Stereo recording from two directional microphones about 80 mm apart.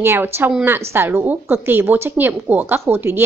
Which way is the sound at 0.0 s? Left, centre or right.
Right.